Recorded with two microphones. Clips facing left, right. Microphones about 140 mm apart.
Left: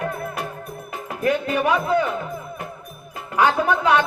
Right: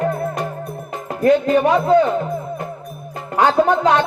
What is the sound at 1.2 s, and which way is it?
Speech, 35° right (ahead or behind).